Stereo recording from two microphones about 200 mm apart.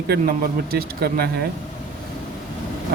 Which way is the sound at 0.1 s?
50° right (ahead or behind).